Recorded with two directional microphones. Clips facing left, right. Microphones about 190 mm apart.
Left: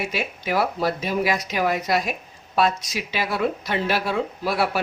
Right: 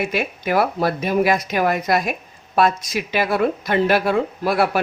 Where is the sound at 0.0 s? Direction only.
55° right (ahead or behind).